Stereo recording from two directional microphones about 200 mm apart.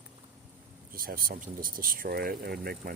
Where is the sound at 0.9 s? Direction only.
45° right (ahead or behind).